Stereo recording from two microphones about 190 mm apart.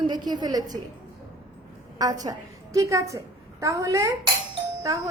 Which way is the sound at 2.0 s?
20° right (ahead or behind).